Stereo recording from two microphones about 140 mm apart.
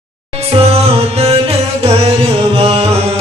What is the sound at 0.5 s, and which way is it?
Music, 40° right (ahead or behind).